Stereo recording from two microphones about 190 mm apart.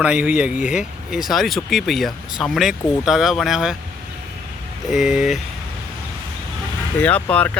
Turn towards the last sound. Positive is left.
turn(degrees=5)  # may be behind; listen again after turning